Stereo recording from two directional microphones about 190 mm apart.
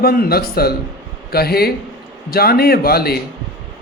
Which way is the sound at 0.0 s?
50° left (ahead or behind).